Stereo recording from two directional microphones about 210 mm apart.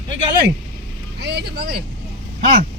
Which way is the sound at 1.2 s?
50° right (ahead or behind).